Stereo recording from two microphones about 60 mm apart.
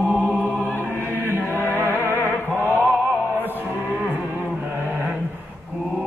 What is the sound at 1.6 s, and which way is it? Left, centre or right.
Music, left.